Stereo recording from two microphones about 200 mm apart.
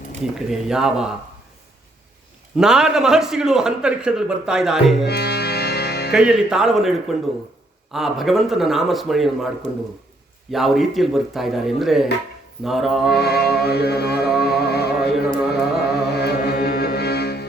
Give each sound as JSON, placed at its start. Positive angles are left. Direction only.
{"t": 0.3, "sound": "a man's voice", "side_deg": -5}
{"t": 2.6, "sound": "a man's voice", "side_deg": -5}
{"t": 5.0, "sound": "music", "side_deg": 55}
{"t": 6.1, "sound": "a man's voice", "side_deg": -5}
{"t": 10.5, "sound": "a man's voice", "side_deg": 0}
{"t": 13.1, "sound": "music", "side_deg": 55}